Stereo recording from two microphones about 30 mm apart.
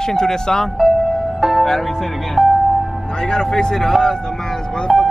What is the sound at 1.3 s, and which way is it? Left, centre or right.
Music, centre.